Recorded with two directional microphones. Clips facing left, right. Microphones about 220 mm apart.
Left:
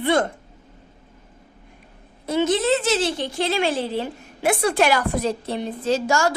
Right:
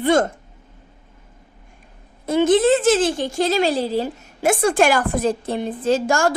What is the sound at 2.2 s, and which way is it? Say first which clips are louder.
A woman's voice: right 5 dB; 50° right (ahead or behind).